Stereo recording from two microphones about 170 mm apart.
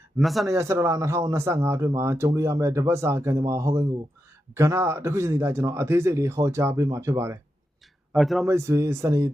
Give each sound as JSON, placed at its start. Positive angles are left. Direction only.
{"t": 0.2, "sound": "speech", "side_deg": 0}
{"t": 0.4, "sound": "speech", "side_deg": -15}
{"t": 8.1, "sound": "speech", "side_deg": 0}
{"t": 8.4, "sound": "speech", "side_deg": -15}